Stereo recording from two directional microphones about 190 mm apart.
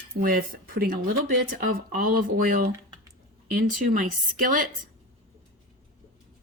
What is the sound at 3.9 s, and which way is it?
Speech, 45° right (ahead or behind).